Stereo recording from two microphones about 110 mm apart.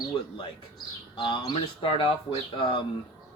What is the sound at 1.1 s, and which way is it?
Speech, 50° left (ahead or behind).